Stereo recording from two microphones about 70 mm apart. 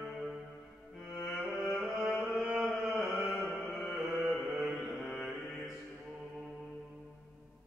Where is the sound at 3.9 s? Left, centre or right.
Centre.